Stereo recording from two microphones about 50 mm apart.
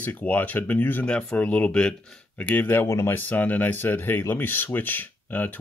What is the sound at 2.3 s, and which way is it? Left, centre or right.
Speech, left.